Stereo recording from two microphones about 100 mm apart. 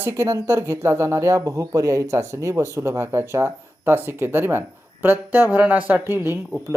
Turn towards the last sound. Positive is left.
turn(degrees=-25)  # may be behind; listen again after turning